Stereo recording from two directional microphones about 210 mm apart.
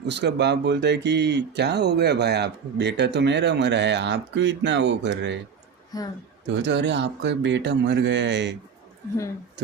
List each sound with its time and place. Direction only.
0.1 s speech: 55° right (ahead or behind)
5.9 s speech: 15° left (ahead or behind)
6.5 s speech: 55° right (ahead or behind)